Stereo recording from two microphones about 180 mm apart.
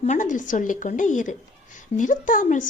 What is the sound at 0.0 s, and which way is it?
Speech, 45° left (ahead or behind).